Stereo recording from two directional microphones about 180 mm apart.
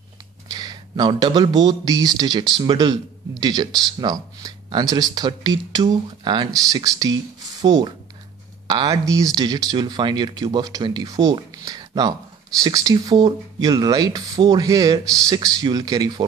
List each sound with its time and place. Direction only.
0.5 s speech: 20° right (ahead or behind)